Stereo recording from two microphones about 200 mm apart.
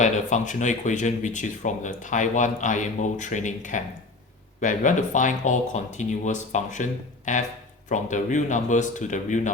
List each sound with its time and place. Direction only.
0.0 s speech: 35° left (ahead or behind)